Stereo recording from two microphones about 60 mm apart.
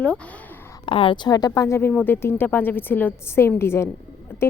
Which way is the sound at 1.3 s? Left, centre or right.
Left.